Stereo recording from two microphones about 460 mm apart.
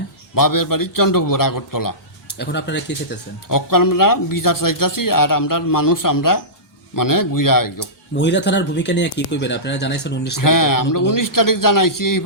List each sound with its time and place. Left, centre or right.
0.3 s a man's voice: left
2.2 s speech: left
3.5 s a man's voice: left
7.8 s speech: left
10.3 s a man's voice: left